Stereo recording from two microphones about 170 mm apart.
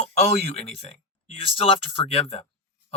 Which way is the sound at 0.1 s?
40° left (ahead or behind).